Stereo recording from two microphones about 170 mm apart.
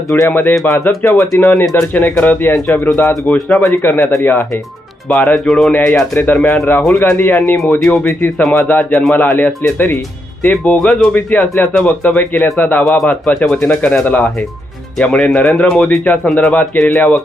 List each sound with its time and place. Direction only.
0.2 s speech: 10° left (ahead or behind)
1.3 s speech: 5° left (ahead or behind)